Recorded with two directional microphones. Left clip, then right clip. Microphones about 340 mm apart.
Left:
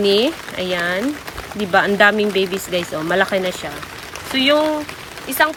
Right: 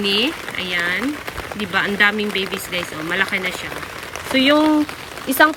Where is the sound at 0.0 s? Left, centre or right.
Centre.